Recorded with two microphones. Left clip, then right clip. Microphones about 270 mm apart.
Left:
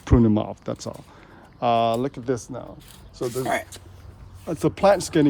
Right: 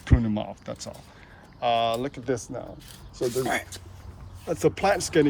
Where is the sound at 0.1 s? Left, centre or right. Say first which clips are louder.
Left 9 dB; right.